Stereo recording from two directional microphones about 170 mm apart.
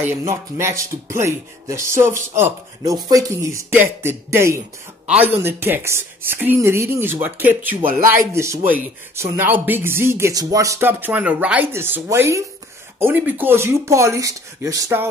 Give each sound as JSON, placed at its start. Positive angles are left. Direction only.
{"t": 0.0, "sound": "speech", "side_deg": -15}